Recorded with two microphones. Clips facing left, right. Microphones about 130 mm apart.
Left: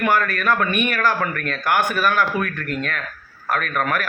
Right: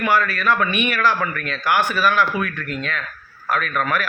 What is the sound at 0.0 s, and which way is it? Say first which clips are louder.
A man's voice: even; 50° left (ahead or behind).